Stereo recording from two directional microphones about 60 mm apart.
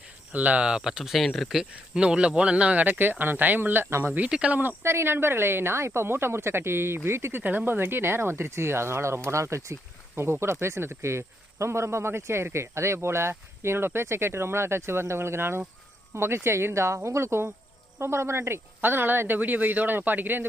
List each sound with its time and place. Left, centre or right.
0.3 s speech: right; by 1.3 s centre
1.7 s speech: centre; by 4.1 s right
4.3 s speech: centre
4.8 s speech: right